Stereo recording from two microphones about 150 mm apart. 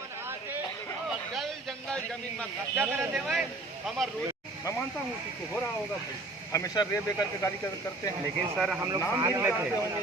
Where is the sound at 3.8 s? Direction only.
Centre (ahead or behind).